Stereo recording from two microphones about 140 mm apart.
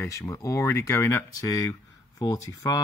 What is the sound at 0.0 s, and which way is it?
Speech, 15° left (ahead or behind).